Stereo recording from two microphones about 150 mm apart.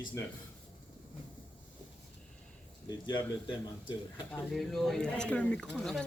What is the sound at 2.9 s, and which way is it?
Speech, 30° left (ahead or behind).